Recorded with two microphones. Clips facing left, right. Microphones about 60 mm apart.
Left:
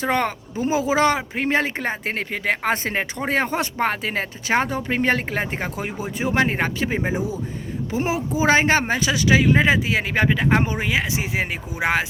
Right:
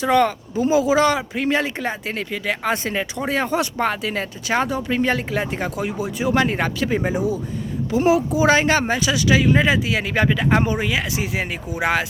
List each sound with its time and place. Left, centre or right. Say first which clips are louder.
0.0 s speech: right 5 dB; left